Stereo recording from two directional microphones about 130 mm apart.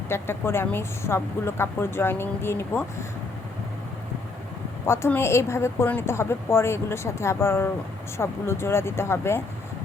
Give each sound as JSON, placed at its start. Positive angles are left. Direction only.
{"t": 0.1, "sound": "a woman's voice", "side_deg": 20}
{"t": 4.9, "sound": "a woman's voice", "side_deg": 20}